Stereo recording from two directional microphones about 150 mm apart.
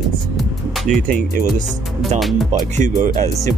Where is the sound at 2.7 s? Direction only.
60° right (ahead or behind).